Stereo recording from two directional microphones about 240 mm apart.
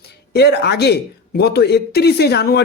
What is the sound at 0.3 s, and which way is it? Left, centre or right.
A man's voice, left.